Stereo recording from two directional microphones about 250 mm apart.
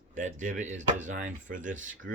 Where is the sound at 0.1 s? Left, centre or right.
Right.